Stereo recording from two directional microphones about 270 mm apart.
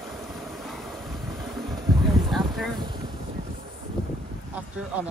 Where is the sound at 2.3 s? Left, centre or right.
Centre.